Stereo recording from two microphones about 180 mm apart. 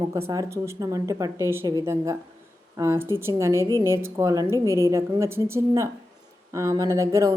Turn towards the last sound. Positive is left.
turn(degrees=-15)  # may be behind; listen again after turning